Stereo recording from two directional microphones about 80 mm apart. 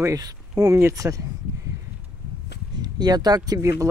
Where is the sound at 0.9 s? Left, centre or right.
Right.